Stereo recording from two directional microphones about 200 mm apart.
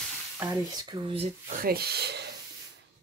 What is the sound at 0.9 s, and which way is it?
Speech, 25° right (ahead or behind).